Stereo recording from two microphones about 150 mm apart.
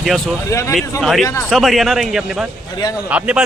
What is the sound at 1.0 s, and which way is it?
A man's voice, centre (ahead or behind).